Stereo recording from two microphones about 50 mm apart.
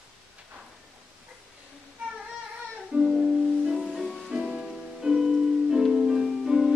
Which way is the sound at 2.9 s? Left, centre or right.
Centre.